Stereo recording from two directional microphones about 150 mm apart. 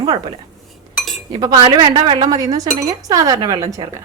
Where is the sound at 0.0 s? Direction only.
35° right (ahead or behind).